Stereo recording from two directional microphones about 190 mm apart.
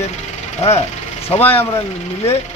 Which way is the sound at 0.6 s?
35° left (ahead or behind).